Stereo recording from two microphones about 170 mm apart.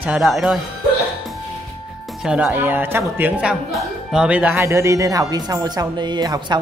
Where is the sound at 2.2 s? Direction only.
5° right (ahead or behind).